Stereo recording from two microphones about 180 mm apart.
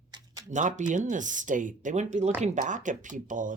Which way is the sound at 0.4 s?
45° right (ahead or behind).